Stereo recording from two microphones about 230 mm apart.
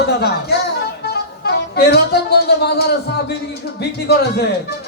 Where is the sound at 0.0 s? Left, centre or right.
Left.